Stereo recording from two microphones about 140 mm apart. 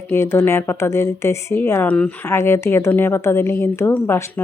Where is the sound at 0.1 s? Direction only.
20° left (ahead or behind).